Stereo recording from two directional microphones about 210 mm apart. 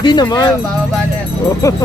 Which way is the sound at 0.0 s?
20° left (ahead or behind).